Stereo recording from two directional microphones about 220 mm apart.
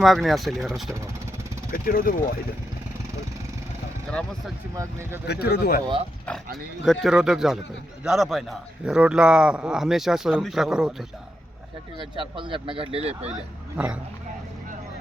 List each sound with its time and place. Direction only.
0.0 s a man's voice: centre (ahead or behind)
1.7 s speech: 40° left (ahead or behind)
4.1 s a man's voice: 5° left (ahead or behind)
4.7 s speech: 15° right (ahead or behind)
5.2 s speech: 50° left (ahead or behind)
6.8 s a man's voice: centre (ahead or behind)
11.9 s speech: 20° right (ahead or behind)
13.7 s a man's voice: 5° right (ahead or behind)